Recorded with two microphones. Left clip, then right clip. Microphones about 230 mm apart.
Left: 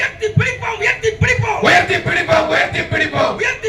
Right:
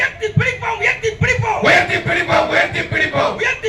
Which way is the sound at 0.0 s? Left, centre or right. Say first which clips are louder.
Even; left.